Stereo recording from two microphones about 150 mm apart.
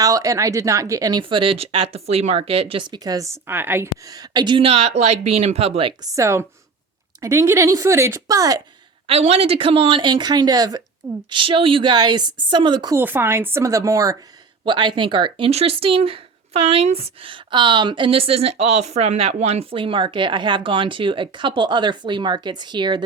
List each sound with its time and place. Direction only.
0.0 s a woman's voice: 20° right (ahead or behind)
1.2 s speech: 35° right (ahead or behind)
6.0 s a woman's voice: 20° right (ahead or behind)
9.0 s speech: 40° right (ahead or behind)
12.9 s a woman's voice: 15° right (ahead or behind); by 23.0 s 30° right (ahead or behind)